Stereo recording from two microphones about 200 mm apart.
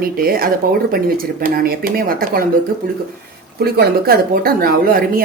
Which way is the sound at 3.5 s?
50° right (ahead or behind).